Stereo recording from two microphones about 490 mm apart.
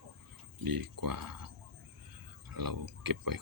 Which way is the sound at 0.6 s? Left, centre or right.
Right.